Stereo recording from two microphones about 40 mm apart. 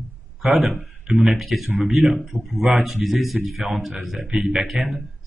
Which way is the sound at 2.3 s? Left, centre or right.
Right.